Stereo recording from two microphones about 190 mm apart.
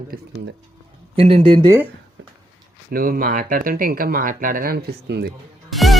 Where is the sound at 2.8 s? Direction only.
50° right (ahead or behind).